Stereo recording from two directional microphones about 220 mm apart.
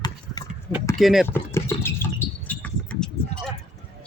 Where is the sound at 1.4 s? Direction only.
10° left (ahead or behind).